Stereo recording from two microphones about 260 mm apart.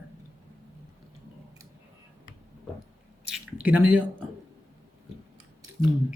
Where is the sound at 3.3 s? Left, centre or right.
Centre.